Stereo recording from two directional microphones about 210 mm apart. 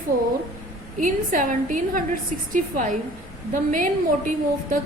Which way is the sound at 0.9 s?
40° right (ahead or behind).